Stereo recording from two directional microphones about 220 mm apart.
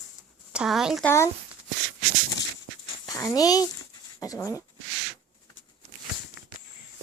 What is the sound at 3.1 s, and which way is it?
A child's voice, 15° left (ahead or behind).